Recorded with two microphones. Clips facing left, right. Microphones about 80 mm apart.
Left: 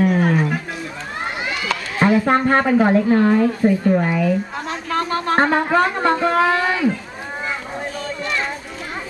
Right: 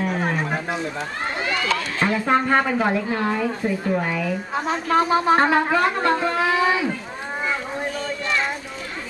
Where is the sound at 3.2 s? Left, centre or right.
Centre.